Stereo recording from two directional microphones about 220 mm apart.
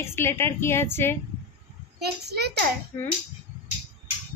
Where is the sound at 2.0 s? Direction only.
45° right (ahead or behind).